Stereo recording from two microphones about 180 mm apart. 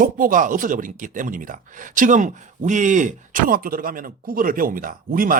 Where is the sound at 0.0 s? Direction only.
50° right (ahead or behind).